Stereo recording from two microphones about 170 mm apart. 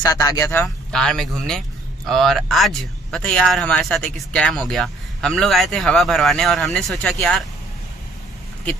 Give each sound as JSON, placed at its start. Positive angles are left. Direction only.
{"t": 0.0, "sound": "speech", "side_deg": 20}
{"t": 0.9, "sound": "speech", "side_deg": 5}